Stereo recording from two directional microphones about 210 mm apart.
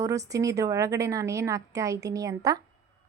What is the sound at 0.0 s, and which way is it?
A woman's voice, 15° right (ahead or behind).